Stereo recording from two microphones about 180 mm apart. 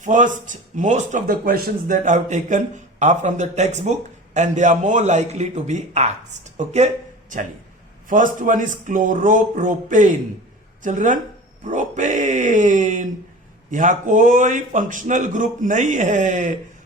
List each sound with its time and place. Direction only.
0.0 s a man's voice: 45° right (ahead or behind)